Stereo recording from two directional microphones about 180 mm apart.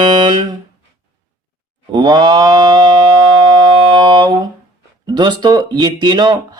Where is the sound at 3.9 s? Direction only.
25° right (ahead or behind).